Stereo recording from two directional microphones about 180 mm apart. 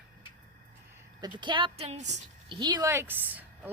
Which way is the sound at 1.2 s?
25° right (ahead or behind).